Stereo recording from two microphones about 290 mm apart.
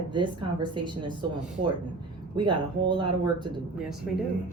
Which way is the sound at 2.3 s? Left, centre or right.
Centre.